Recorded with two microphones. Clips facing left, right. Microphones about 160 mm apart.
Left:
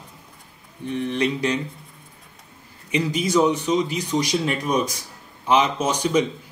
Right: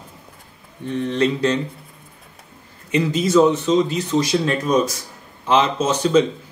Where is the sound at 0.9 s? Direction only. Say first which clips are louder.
Right 3 dB; 15° left (ahead or behind).